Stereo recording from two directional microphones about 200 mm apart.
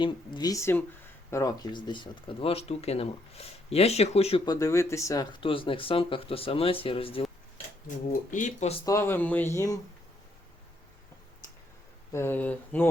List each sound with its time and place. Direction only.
0.0 s speech: 20° left (ahead or behind)
4.6 s speech: 15° left (ahead or behind)
7.9 s speech: 40° left (ahead or behind)
8.8 s speech: 15° left (ahead or behind)
12.1 s speech: 10° left (ahead or behind)